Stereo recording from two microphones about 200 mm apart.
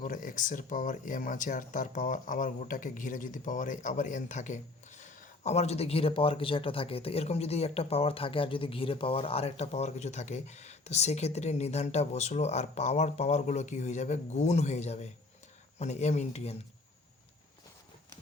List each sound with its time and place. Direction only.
0.0 s speech: 40° left (ahead or behind)